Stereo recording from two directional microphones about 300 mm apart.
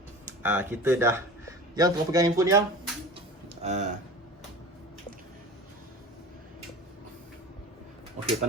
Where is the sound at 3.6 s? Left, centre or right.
Right.